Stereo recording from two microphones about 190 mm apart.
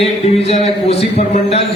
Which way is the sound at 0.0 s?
35° left (ahead or behind).